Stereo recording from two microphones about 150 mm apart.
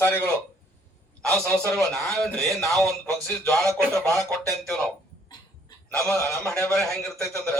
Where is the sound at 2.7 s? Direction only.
Centre (ahead or behind).